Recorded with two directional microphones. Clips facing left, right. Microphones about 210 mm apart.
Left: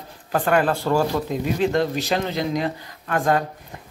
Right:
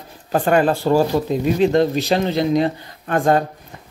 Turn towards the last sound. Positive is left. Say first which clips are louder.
# right 4 dB
turn(degrees=-30)  # may be behind; listen again after turning